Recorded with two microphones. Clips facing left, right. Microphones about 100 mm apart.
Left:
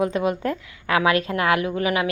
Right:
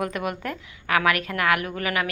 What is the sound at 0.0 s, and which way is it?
A woman's voice, 25° left (ahead or behind).